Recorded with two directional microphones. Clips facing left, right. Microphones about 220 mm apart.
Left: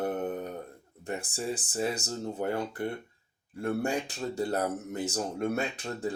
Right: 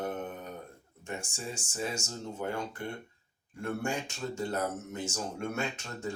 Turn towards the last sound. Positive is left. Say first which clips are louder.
# left 4 dB
turn(degrees=35)  # may be behind; listen again after turning